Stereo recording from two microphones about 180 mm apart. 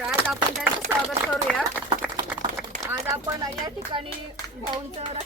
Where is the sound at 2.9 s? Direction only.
20° right (ahead or behind).